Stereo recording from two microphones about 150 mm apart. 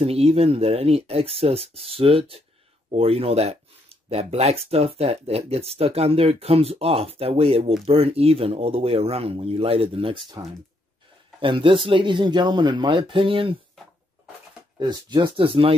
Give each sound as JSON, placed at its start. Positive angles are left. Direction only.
{"t": 0.0, "sound": "speech", "side_deg": -40}
{"t": 14.8, "sound": "speech", "side_deg": -30}